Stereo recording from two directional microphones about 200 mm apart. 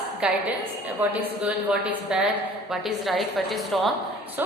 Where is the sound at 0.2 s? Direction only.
5° right (ahead or behind).